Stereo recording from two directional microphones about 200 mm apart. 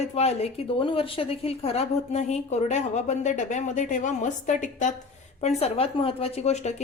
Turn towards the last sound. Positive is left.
turn(degrees=35)  # may be behind; listen again after turning